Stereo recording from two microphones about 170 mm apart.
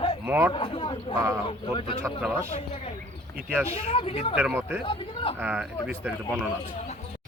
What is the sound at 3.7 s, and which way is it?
Speech, 35° left (ahead or behind).